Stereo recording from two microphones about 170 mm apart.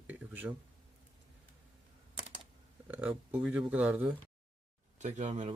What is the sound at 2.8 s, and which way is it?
Speech, 10° right (ahead or behind).